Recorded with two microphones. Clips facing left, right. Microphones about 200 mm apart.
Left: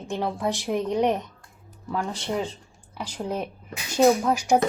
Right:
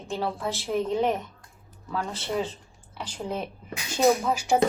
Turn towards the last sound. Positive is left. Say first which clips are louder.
# left 3 dB
turn(degrees=10)  # may be behind; listen again after turning